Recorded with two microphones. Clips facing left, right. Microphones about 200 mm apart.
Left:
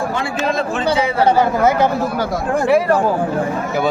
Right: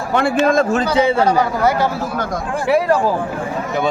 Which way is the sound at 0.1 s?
55° right (ahead or behind).